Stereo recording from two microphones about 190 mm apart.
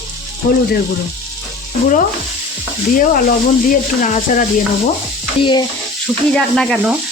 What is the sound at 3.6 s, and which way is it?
Speech, 45° left (ahead or behind).